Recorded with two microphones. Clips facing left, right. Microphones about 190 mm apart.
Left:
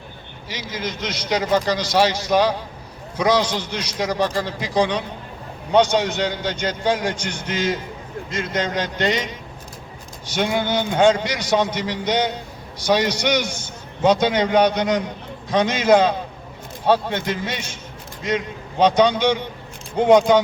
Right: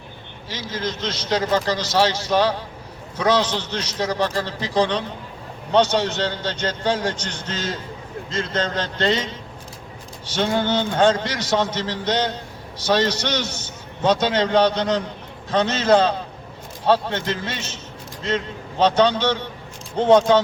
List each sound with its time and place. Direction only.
0.4 s a man's voice: 15° left (ahead or behind)